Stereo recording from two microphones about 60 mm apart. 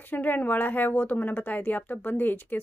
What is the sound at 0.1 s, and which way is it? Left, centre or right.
A woman's voice, left.